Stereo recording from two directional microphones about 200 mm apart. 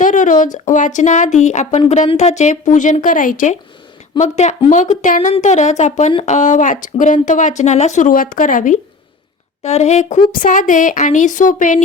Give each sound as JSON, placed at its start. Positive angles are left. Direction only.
{"t": 0.0, "sound": "a woman's voice", "side_deg": 40}